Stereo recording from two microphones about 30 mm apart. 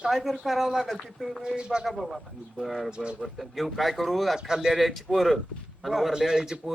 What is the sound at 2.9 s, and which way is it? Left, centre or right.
Speech, right.